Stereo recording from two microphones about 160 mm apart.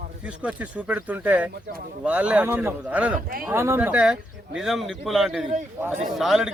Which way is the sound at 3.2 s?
65° right (ahead or behind).